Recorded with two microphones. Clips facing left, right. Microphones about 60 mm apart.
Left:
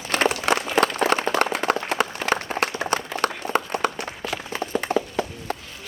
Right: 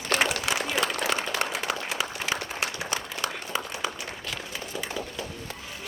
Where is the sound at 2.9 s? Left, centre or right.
Left.